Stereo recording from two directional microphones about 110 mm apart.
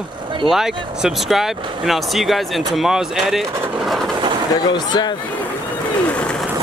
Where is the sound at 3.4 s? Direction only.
25° right (ahead or behind).